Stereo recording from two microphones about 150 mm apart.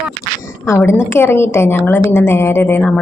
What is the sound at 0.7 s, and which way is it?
A woman's voice, 15° left (ahead or behind).